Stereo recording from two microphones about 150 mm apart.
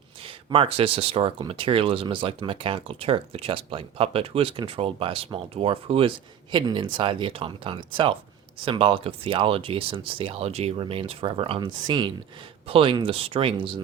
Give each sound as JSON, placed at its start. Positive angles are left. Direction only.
{"t": 0.3, "sound": "speech", "side_deg": -40}